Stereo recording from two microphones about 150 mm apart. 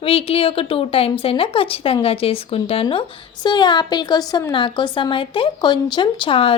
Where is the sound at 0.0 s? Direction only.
40° left (ahead or behind).